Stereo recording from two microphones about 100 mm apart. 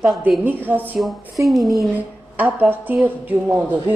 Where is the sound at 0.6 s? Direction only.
20° right (ahead or behind).